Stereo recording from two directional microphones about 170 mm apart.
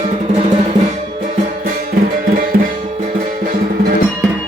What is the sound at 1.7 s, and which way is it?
Music, 50° right (ahead or behind).